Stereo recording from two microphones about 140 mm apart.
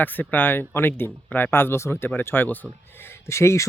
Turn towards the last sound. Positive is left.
turn(degrees=20)  # may be behind; listen again after turning